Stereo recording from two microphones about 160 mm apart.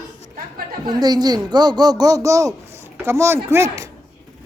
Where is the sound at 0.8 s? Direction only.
25° right (ahead or behind).